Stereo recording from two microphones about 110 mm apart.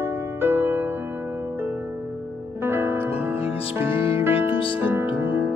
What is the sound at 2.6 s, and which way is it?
Music, 20° right (ahead or behind).